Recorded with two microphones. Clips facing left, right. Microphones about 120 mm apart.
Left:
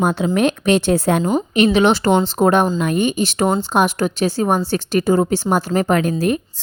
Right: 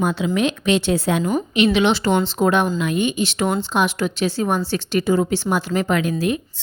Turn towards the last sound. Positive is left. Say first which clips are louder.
# left 3 dB
turn(degrees=45)  # may be behind; listen again after turning